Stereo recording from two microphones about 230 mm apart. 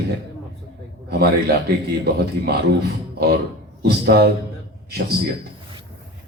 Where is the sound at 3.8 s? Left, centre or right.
Right.